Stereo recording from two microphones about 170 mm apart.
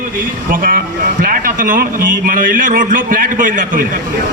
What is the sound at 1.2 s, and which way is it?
A man's voice, 55° right (ahead or behind).